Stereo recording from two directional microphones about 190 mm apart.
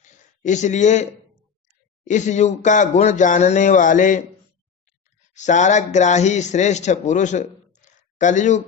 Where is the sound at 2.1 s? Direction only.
40° left (ahead or behind).